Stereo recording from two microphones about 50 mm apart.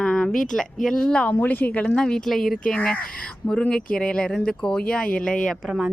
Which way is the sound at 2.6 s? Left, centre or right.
Left.